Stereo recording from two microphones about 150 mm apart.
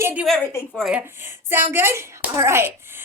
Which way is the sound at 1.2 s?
15° right (ahead or behind).